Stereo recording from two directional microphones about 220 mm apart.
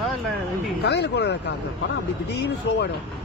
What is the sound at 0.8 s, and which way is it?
Speech, 50° left (ahead or behind).